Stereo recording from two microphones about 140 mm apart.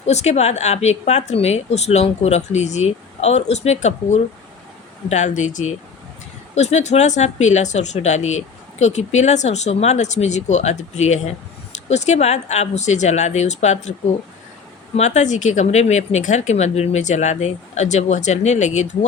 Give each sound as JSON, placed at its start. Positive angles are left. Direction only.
{"t": 0.0, "sound": "a woman's voice", "side_deg": 50}
{"t": 14.9, "sound": "speech", "side_deg": 55}